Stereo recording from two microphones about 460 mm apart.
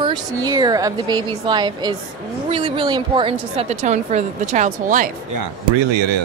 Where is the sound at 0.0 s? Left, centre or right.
Centre.